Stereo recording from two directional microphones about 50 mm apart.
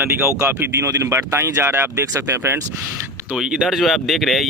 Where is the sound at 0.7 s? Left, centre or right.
Right.